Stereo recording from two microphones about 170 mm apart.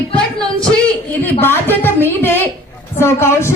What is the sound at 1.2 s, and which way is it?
A woman's voice, 10° left (ahead or behind).